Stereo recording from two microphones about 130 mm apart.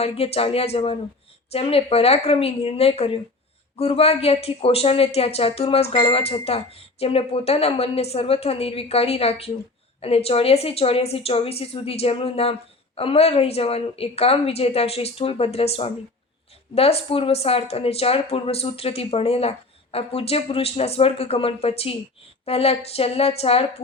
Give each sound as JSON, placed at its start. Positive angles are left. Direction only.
{"t": 0.0, "sound": "speech", "side_deg": 50}